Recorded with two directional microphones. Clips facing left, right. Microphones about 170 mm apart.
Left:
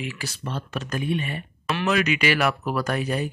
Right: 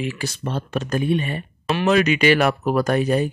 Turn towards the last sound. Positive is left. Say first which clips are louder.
# right 7 dB
turn(degrees=-30)  # may be behind; listen again after turning